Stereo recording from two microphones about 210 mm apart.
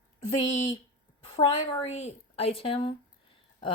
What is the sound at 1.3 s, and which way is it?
Speech, 25° left (ahead or behind).